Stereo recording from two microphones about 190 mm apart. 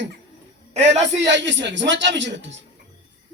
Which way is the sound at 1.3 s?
70° right (ahead or behind).